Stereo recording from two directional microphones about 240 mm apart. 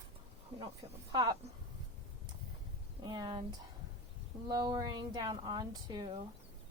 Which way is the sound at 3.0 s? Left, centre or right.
Centre.